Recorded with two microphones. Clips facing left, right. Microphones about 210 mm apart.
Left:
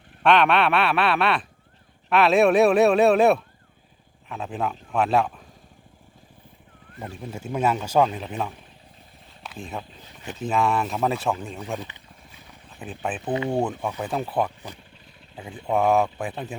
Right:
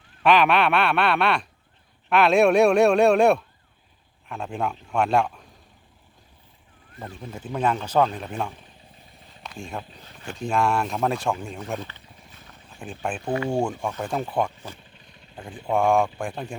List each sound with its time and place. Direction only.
0.2 s a man's voice: centre (ahead or behind)
7.3 s speech: 10° left (ahead or behind)
9.4 s a sound: 5° left (ahead or behind)
10.3 s a man's voice: 5° left (ahead or behind)
12.3 s a sound: 5° left (ahead or behind)
13.3 s speech: 20° left (ahead or behind)
13.8 s a man's voice: 5° left (ahead or behind)